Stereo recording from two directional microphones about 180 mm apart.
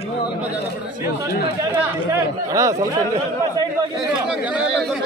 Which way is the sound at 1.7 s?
15° right (ahead or behind).